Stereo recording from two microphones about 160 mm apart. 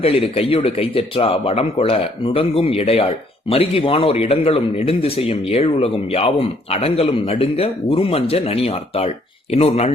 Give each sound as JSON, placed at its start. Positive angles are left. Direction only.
{"t": 0.0, "sound": "a man's voice", "side_deg": 40}